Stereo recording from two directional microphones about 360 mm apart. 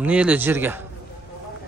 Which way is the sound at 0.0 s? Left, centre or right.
Centre.